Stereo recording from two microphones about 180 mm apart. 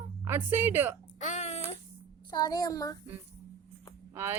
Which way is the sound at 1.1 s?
40° left (ahead or behind).